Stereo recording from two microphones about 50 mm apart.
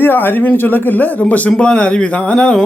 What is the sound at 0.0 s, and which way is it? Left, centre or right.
Speech, left.